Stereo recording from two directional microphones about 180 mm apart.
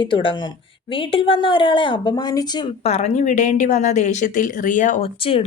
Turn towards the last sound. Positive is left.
turn(degrees=30)  # may be behind; listen again after turning